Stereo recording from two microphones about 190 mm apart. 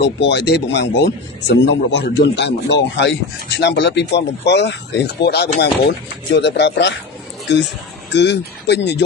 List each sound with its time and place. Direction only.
0.0 s a man's voice: 65° left (ahead or behind)
8.1 s a man's voice: 65° left (ahead or behind)